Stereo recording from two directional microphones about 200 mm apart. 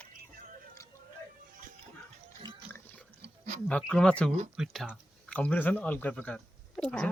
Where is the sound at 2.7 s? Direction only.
10° left (ahead or behind).